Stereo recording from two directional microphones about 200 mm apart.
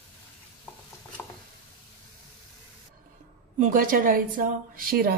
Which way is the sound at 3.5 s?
40° right (ahead or behind).